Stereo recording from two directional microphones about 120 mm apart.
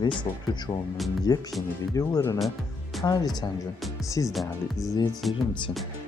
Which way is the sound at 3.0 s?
35° left (ahead or behind).